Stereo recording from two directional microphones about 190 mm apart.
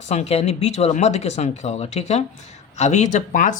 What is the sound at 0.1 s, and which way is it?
Speech, 35° left (ahead or behind).